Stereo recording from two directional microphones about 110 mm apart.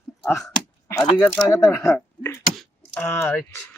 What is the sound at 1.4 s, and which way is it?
Speech, 30° left (ahead or behind).